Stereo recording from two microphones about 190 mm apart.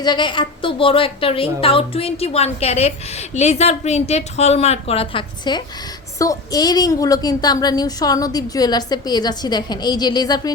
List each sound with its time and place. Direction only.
0.0 s a woman's voice: 25° left (ahead or behind)